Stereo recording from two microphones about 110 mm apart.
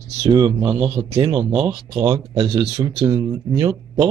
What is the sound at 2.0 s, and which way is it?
Speech, 35° right (ahead or behind).